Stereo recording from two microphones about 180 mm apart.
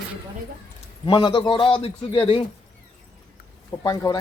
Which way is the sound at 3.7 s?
20° left (ahead or behind).